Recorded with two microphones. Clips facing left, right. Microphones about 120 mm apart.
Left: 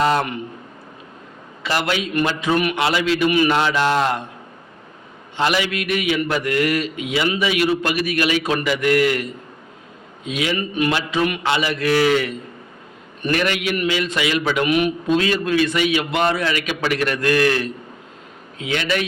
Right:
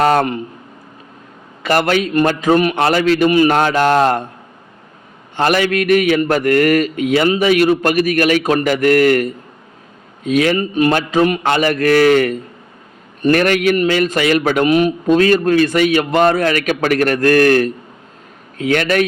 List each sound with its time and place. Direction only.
0.0 s a sound: 50° right (ahead or behind)
1.6 s a man's voice: 50° right (ahead or behind)
5.4 s a man's voice: 50° right (ahead or behind)